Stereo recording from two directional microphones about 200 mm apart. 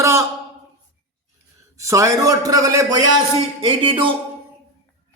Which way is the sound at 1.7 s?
15° right (ahead or behind).